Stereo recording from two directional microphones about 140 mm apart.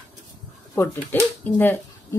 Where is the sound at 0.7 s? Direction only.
15° left (ahead or behind).